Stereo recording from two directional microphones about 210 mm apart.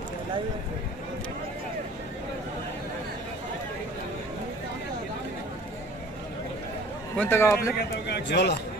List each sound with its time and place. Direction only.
7.2 s a man's voice: 10° left (ahead or behind)
8.1 s a man's voice: 55° left (ahead or behind)